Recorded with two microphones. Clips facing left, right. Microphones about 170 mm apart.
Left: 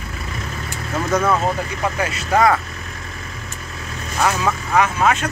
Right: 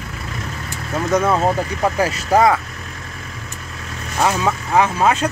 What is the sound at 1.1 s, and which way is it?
Speech, 20° right (ahead or behind).